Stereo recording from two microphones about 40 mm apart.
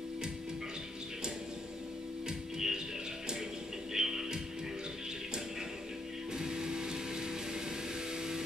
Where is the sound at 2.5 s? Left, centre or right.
Centre.